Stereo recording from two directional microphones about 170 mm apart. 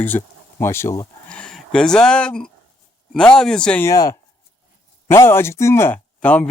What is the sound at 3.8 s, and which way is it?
Speech, 20° left (ahead or behind).